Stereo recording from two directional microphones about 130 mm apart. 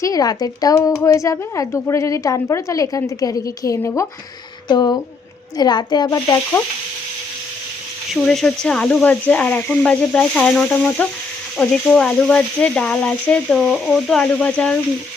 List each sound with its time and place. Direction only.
0.0 s speech: 30° left (ahead or behind)
8.1 s speech: centre (ahead or behind)